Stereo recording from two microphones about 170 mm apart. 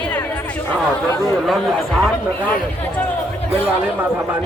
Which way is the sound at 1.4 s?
Centre (ahead or behind).